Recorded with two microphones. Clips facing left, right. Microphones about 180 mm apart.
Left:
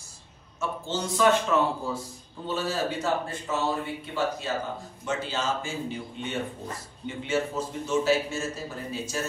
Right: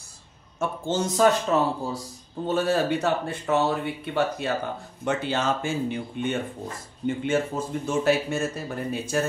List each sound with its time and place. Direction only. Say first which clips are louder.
0.6 s speech: right 5 dB; 50° right (ahead or behind)
2.4 s a man's voice: right 6 dB; 55° right (ahead or behind)